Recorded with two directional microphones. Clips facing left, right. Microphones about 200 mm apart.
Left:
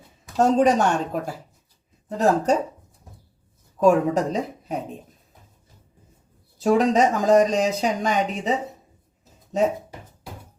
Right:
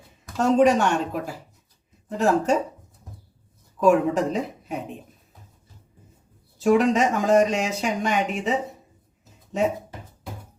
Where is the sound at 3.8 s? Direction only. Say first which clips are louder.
Left 1 dB; 40° left (ahead or behind).